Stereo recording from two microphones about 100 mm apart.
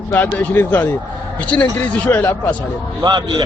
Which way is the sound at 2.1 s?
20° left (ahead or behind).